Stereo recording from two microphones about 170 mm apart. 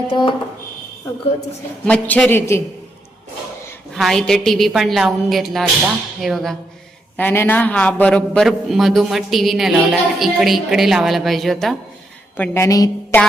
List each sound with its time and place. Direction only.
0.1 s speech: 30° left (ahead or behind)
1.8 s a man's voice: 5° left (ahead or behind)
3.9 s a man's voice: centre (ahead or behind)
7.2 s a man's voice: 10° left (ahead or behind)
12.4 s a woman's voice: 15° left (ahead or behind)